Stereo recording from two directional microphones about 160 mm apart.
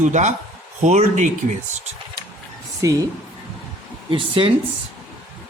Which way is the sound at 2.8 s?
20° right (ahead or behind).